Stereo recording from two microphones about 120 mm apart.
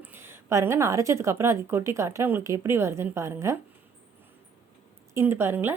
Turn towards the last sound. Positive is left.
turn(degrees=-20)  # may be behind; listen again after turning